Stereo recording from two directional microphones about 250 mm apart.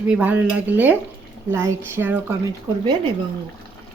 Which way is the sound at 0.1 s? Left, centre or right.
Centre.